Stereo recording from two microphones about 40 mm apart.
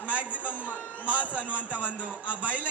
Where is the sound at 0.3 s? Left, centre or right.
Right.